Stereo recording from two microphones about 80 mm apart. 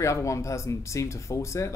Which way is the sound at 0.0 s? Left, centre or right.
Left.